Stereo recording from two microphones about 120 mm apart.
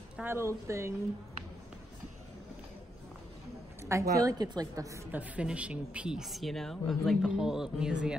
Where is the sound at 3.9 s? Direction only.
25° right (ahead or behind).